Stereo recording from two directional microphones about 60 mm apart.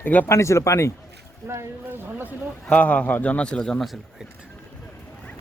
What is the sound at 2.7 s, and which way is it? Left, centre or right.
A man's voice, left.